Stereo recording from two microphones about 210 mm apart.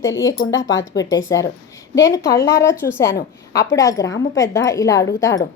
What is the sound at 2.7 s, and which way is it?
Speech, 10° left (ahead or behind).